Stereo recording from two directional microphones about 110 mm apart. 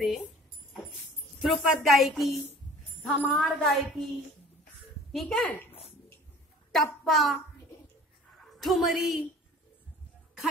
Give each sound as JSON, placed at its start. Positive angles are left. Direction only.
{"t": 1.4, "sound": "speech", "side_deg": 0}
{"t": 5.1, "sound": "speech", "side_deg": 0}
{"t": 6.7, "sound": "a child's voice", "side_deg": 5}
{"t": 8.5, "sound": "speech", "side_deg": 0}